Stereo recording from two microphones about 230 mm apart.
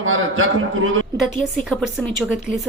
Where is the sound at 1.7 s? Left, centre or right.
Centre.